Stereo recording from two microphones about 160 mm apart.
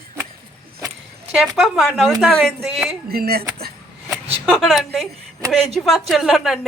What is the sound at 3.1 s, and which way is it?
Speech, 70° right (ahead or behind).